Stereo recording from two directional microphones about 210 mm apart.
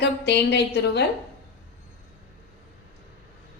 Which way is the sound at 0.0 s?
55° left (ahead or behind).